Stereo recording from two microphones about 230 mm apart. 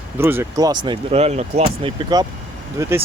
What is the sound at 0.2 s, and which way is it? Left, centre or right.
Speech, centre.